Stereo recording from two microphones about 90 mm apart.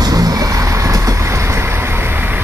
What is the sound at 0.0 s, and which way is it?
Vehicle, 45° right (ahead or behind).